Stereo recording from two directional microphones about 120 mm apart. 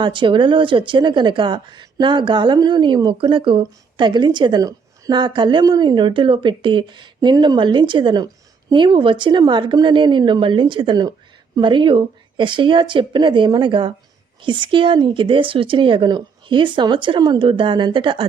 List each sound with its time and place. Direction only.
0.0 s speech: 45° right (ahead or behind)